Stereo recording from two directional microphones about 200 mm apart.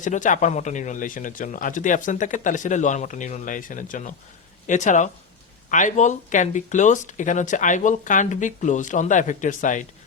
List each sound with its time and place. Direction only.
0.0 s speech: 40° left (ahead or behind)